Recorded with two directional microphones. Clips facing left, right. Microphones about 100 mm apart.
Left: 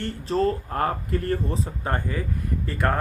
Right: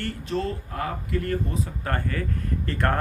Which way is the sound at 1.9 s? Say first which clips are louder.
Even; 15° left (ahead or behind).